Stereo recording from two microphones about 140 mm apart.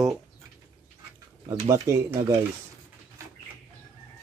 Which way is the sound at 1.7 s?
25° right (ahead or behind).